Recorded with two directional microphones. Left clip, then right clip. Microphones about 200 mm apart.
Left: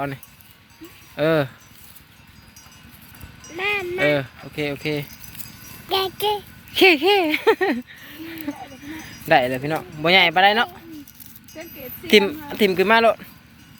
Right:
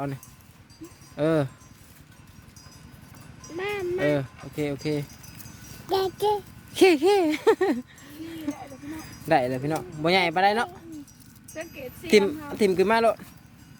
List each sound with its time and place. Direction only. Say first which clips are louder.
1.1 s speech: left 5 dB; 5° right (ahead or behind)
3.5 s speech: left 5 dB; 25° right (ahead or behind)
4.0 s speech: left 7 dB; centre (ahead or behind)
5.9 s a child's voice: left 2 dB; 35° right (ahead or behind)
6.7 s speech: left 4 dB; 10° right (ahead or behind)